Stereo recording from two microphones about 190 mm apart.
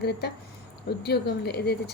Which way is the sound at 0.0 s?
60° left (ahead or behind).